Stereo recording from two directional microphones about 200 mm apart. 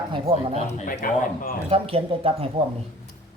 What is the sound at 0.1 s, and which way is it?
Speech, 30° right (ahead or behind).